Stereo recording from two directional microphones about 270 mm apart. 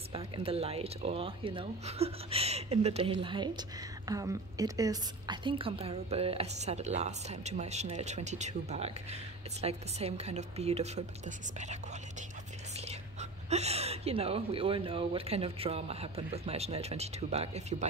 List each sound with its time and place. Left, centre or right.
0.1 s a woman's voice: right